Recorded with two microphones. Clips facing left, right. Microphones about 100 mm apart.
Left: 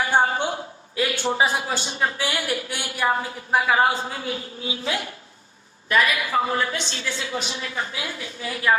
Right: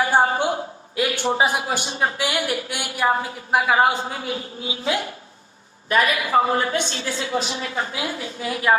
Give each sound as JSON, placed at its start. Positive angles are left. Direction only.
{"t": 0.0, "sound": "a woman's voice", "side_deg": -30}